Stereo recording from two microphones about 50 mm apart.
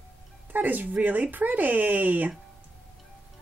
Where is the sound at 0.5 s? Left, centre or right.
Right.